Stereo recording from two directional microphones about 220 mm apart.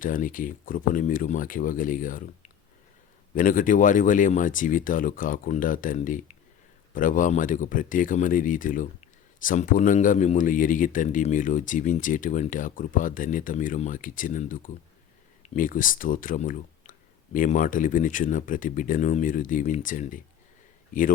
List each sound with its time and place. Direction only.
0.0 s speech: 40° left (ahead or behind)